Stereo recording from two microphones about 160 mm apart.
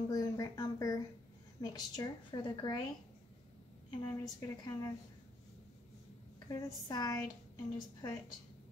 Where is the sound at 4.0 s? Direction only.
25° left (ahead or behind).